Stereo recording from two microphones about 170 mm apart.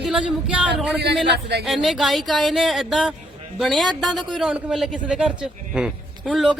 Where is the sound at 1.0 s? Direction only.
75° right (ahead or behind).